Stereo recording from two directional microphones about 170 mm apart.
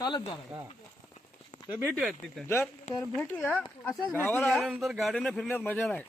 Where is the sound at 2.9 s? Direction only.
45° left (ahead or behind).